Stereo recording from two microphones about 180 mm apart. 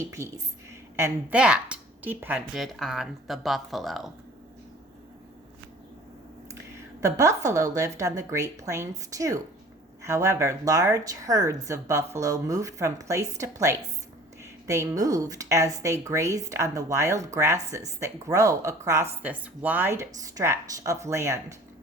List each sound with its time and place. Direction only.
0.0 s speech: 15° right (ahead or behind)
6.5 s speech: 15° right (ahead or behind)